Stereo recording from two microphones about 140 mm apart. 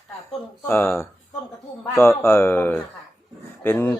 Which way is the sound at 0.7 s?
15° left (ahead or behind).